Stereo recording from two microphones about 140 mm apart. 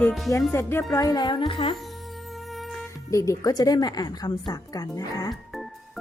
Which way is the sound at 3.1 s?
20° left (ahead or behind).